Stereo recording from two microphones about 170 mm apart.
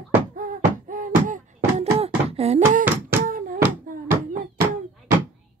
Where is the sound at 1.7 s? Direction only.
35° right (ahead or behind).